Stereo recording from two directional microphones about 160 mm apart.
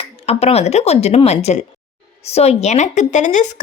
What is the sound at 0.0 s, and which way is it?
Speech, 40° left (ahead or behind).